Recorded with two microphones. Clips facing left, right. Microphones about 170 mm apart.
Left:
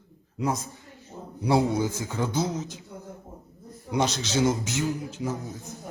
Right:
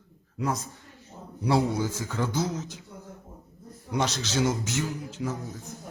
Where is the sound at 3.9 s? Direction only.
15° left (ahead or behind).